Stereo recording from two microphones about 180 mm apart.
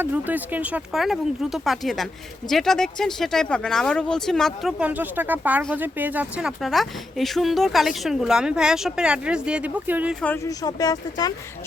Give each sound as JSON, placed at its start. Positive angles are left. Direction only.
{"t": 0.0, "sound": "speech", "side_deg": -10}
{"t": 10.2, "sound": "speech", "side_deg": 10}